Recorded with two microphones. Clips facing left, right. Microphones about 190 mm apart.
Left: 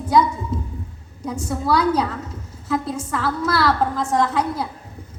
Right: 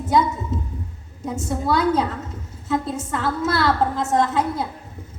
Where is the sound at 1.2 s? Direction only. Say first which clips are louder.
Even; 25° right (ahead or behind).